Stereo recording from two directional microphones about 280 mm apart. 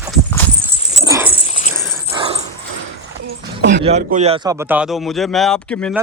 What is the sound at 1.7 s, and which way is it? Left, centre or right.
Dog, centre.